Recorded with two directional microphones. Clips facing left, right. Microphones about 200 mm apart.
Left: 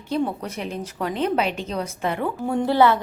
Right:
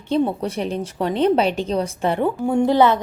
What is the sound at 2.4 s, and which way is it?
Speech, 15° right (ahead or behind).